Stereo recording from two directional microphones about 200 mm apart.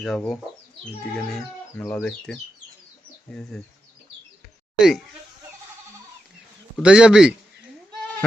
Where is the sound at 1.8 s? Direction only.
10° left (ahead or behind).